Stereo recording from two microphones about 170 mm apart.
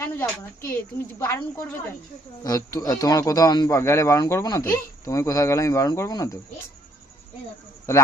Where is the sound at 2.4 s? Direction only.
20° left (ahead or behind).